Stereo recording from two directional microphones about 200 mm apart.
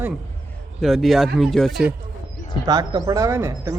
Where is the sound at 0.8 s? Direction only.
Centre (ahead or behind).